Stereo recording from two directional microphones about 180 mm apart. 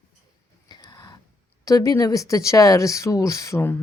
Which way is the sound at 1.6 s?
20° left (ahead or behind).